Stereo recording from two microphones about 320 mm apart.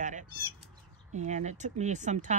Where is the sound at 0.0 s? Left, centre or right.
Right.